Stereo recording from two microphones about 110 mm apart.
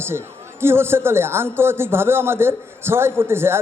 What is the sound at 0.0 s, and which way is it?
A man's voice, 20° right (ahead or behind).